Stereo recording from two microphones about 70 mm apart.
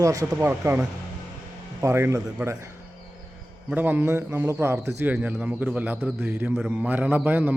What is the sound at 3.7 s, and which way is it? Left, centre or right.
A man's voice, right.